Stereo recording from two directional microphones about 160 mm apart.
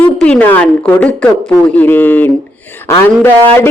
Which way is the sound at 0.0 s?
5° left (ahead or behind).